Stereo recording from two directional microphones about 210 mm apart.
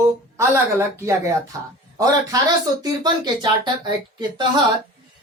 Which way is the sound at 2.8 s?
20° right (ahead or behind).